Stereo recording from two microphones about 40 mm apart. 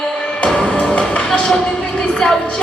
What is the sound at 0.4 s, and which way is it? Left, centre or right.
Music, left.